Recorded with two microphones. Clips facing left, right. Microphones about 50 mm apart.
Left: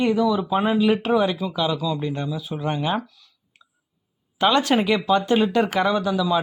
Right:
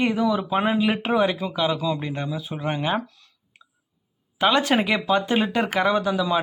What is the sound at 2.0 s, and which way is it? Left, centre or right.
Speech, centre.